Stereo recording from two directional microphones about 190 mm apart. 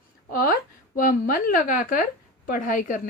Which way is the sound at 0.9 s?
45° left (ahead or behind).